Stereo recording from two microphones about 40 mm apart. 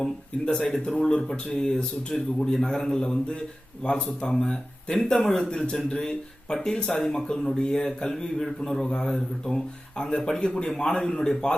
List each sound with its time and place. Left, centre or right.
0.5 s a man's voice: centre; by 4.0 s left
4.2 s a man's voice: centre